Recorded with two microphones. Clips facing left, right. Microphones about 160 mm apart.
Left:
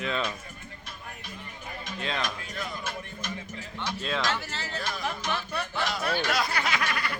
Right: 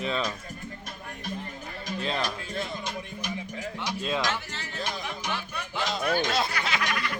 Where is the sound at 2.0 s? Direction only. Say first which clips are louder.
Right 2 dB; 35° right (ahead or behind).